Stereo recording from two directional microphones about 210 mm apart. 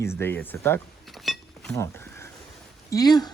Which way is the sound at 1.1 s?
Centre (ahead or behind).